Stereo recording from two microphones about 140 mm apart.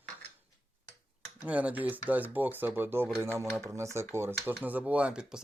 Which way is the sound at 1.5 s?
10° right (ahead or behind).